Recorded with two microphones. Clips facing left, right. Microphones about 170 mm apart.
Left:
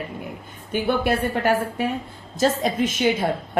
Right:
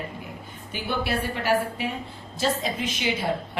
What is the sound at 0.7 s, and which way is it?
Speech, 50° left (ahead or behind).